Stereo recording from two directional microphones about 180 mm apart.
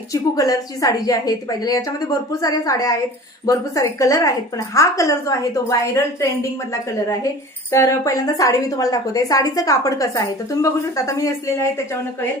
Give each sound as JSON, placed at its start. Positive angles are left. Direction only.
{"t": 0.1, "sound": "a woman's voice", "side_deg": 20}
{"t": 7.7, "sound": "a woman's voice", "side_deg": 15}